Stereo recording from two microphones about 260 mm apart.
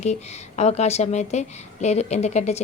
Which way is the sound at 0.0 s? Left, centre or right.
Left.